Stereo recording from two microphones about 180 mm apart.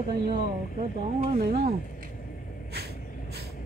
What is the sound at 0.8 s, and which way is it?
Speech, 40° right (ahead or behind).